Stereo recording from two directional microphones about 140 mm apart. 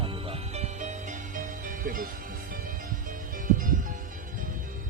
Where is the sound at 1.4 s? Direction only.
75° right (ahead or behind).